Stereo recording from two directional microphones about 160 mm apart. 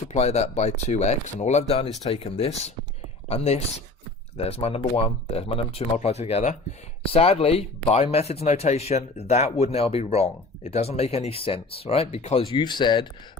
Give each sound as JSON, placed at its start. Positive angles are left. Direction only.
{"t": 0.1, "sound": "speech", "side_deg": 40}